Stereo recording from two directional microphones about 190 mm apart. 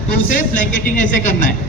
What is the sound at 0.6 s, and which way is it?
Speech, 45° left (ahead or behind).